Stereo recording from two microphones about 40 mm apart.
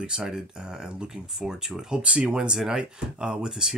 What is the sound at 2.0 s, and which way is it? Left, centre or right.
Speech, right.